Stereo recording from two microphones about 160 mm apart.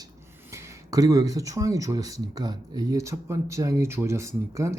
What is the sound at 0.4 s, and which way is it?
Speech, 15° right (ahead or behind).